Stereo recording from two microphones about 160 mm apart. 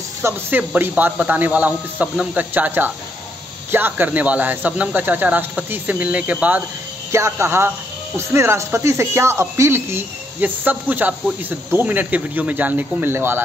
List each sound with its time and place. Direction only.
0.2 s speech: 10° right (ahead or behind)